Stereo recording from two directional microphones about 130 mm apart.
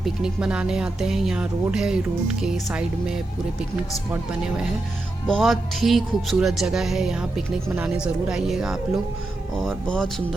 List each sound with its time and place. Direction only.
0.0 s speech: 5° right (ahead or behind)
4.1 s speech: 5° right (ahead or behind)